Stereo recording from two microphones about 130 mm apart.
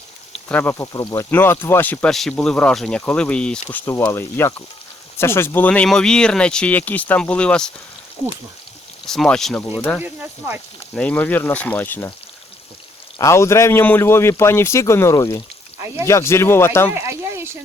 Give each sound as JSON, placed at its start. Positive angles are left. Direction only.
{"t": 0.4, "sound": "speech", "side_deg": 15}
{"t": 9.0, "sound": "speech", "side_deg": 5}
{"t": 10.0, "sound": "speech", "side_deg": -15}
{"t": 10.9, "sound": "speech", "side_deg": 10}
{"t": 13.1, "sound": "a man's voice", "side_deg": 20}
{"t": 16.9, "sound": "a sound", "side_deg": -20}